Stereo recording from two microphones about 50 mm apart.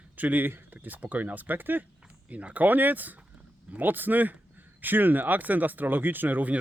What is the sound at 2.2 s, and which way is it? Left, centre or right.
Speech, right.